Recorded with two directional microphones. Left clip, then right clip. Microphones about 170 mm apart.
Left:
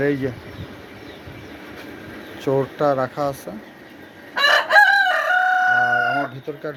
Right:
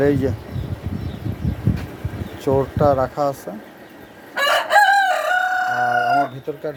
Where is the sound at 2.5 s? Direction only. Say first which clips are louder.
Right 3 dB; 15° right (ahead or behind).